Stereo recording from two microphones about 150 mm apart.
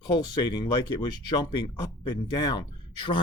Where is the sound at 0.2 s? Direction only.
30° left (ahead or behind).